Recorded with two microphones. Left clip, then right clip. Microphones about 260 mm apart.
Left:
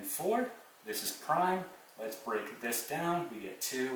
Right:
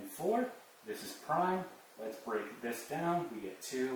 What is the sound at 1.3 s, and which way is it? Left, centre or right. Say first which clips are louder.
Speech: left 2 dB; centre.